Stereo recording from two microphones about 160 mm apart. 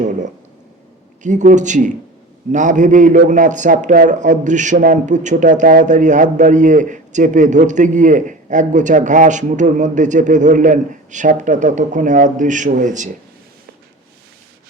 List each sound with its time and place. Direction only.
1.2 s a man's voice: 50° right (ahead or behind)